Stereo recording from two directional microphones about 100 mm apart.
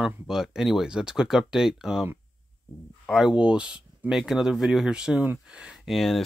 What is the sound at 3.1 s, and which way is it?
Speech, 5° right (ahead or behind).